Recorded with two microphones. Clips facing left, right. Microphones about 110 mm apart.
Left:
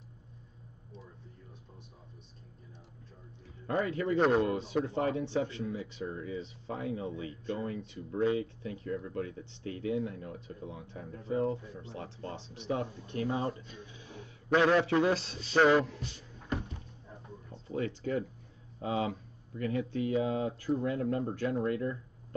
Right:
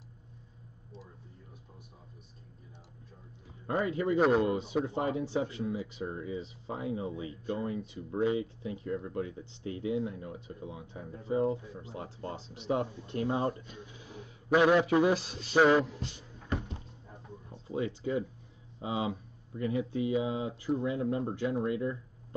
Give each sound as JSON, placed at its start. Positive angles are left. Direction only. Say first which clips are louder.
{"t": 3.6, "sound": "a man's voice", "louder": "right 1 dB", "side_deg": -20}
{"t": 17.5, "sound": "a sound", "louder": "right 1 dB", "side_deg": -15}
{"t": 18.8, "sound": "a man's voice", "louder": "left 1 dB", "side_deg": -15}